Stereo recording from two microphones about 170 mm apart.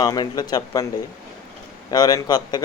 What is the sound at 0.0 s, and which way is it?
Speech, 25° left (ahead or behind).